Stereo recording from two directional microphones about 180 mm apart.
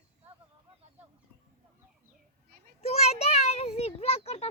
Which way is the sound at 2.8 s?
35° left (ahead or behind).